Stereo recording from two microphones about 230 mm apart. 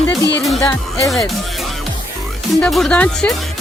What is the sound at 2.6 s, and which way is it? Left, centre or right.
Speech, centre.